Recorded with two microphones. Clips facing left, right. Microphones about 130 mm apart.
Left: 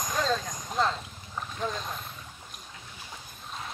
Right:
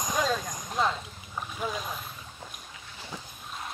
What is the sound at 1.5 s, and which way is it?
Speech, 5° right (ahead or behind).